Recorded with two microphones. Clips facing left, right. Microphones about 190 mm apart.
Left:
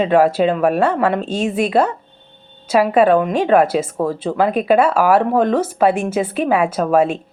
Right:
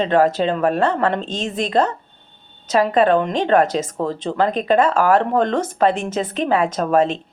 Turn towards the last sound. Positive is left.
turn(degrees=10)  # may be behind; listen again after turning